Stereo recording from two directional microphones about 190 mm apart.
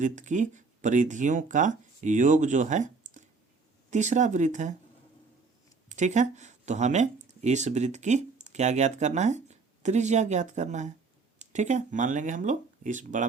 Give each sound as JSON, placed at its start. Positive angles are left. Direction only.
{"t": 0.0, "sound": "speech", "side_deg": -40}
{"t": 5.9, "sound": "speech", "side_deg": -40}